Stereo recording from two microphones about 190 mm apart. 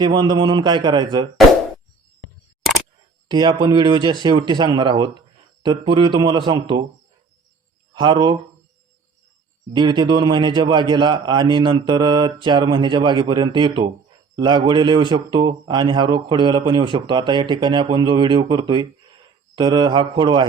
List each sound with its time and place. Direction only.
0.0 s a man's voice: 25° right (ahead or behind)
3.2 s a man's voice: 20° right (ahead or behind)
7.9 s a man's voice: 25° right (ahead or behind)
9.7 s a man's voice: 25° right (ahead or behind)